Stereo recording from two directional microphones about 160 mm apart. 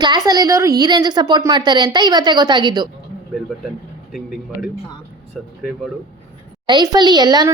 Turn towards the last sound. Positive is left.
turn(degrees=-25)  # may be behind; listen again after turning